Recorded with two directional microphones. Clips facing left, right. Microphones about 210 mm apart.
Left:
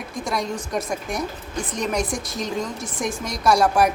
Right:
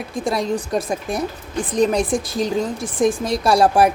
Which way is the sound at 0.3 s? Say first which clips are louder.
Right 6 dB; 30° right (ahead or behind).